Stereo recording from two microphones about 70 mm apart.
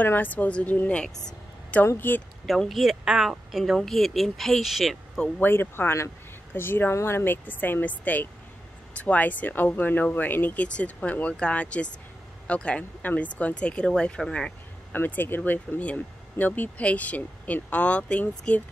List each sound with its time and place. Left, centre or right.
0.0 s speech: left
2.4 s a woman's voice: centre
5.4 s speech: left; by 14.5 s centre
14.9 s speech: left